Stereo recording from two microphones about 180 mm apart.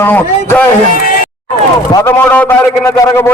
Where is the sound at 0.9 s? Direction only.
50° left (ahead or behind).